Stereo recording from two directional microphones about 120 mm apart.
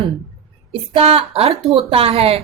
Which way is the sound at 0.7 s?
55° right (ahead or behind).